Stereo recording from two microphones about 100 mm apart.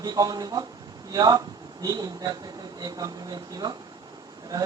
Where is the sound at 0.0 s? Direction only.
40° right (ahead or behind).